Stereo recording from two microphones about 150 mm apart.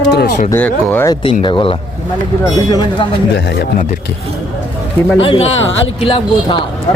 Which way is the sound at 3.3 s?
90° left.